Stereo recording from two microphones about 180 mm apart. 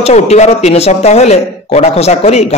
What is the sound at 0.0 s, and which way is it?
Speech, 35° left (ahead or behind).